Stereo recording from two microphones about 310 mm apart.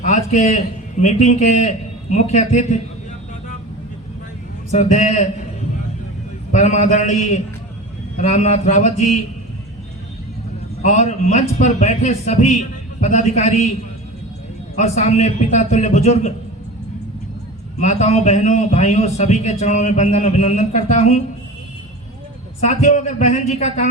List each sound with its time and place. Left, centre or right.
0.0 s a man's voice: left
4.7 s a man's voice: left
6.5 s a man's voice: left
10.8 s a man's voice: left
14.8 s a man's voice: left
17.7 s a man's voice: left
22.6 s a man's voice: left